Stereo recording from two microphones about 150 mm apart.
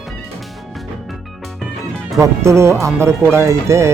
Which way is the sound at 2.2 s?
20° right (ahead or behind).